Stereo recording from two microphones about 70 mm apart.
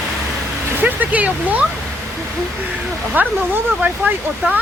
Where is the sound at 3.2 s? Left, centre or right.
Right.